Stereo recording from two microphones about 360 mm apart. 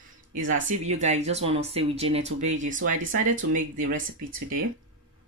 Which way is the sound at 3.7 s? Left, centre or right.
Right.